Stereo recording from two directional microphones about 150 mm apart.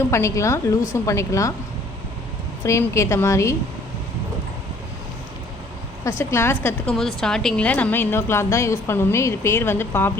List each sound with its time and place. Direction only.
0.1 s a woman's voice: 20° left (ahead or behind)
2.6 s a woman's voice: 20° left (ahead or behind)
6.1 s a woman's voice: 20° left (ahead or behind)
6.9 s a woman's voice: centre (ahead or behind)